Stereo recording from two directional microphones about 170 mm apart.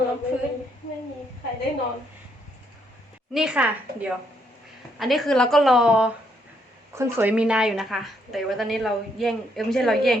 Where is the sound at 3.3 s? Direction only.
5° right (ahead or behind).